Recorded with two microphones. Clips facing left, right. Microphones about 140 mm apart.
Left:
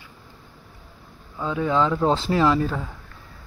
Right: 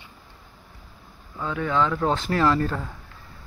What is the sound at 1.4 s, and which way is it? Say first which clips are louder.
Speech: left 3 dB; 20° left (ahead or behind).